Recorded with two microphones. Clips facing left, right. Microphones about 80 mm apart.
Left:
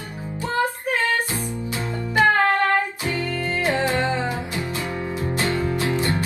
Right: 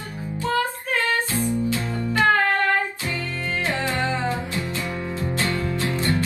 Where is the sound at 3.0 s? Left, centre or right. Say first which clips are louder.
Left 3 dB; left.